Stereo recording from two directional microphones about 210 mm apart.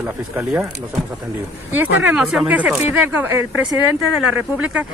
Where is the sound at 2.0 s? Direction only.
5° right (ahead or behind).